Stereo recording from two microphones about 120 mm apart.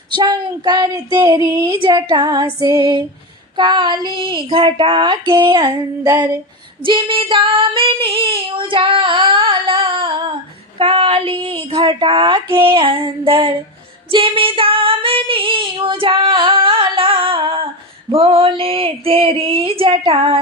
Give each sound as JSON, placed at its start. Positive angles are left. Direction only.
{"t": 0.2, "sound": "child singing", "side_deg": -35}
{"t": 6.8, "sound": "female singing", "side_deg": -45}
{"t": 10.8, "sound": "speech", "side_deg": -50}
{"t": 14.1, "sound": "female singing", "side_deg": -45}
{"t": 18.1, "sound": "speech", "side_deg": -50}